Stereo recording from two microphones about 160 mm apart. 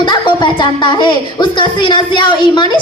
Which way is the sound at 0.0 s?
30° left (ahead or behind).